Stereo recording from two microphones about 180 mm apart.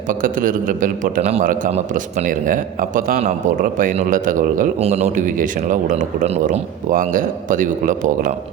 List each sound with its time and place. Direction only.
0.1 s a man's voice: 50° right (ahead or behind)
6.9 s a man's voice: 45° right (ahead or behind)